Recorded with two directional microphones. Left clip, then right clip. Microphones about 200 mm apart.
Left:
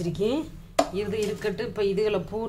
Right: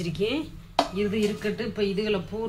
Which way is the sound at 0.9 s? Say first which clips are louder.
Right 1 dB; 50° left (ahead or behind).